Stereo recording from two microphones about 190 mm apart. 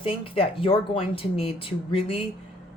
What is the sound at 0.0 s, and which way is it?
Speech, 30° left (ahead or behind).